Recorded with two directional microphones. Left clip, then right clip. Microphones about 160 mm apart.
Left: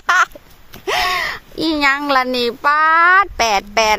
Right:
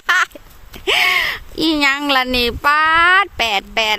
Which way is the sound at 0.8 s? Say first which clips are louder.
Right 3 dB; 10° right (ahead or behind).